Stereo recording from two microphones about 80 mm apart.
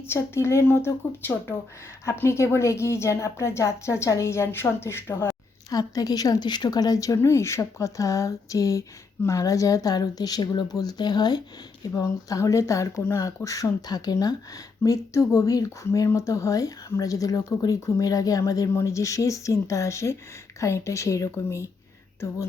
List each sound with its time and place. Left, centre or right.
0.1 s a woman's voice: left
5.7 s speech: left
7.2 s a woman's voice: left
11.9 s speech: left
14.8 s a woman's voice: left